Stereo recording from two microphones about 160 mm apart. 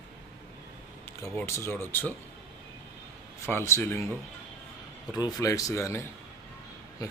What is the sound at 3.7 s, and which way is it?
Speech, 15° left (ahead or behind).